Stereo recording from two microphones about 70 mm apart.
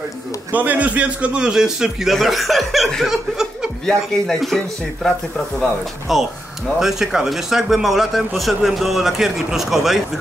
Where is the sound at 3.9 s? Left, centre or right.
Centre.